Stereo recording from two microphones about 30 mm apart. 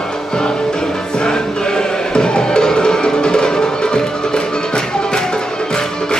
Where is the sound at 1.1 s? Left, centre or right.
Left.